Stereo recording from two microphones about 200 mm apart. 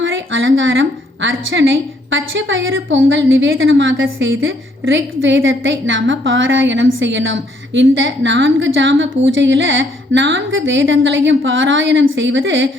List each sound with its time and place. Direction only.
0.0 s a woman's voice: 75° right (ahead or behind)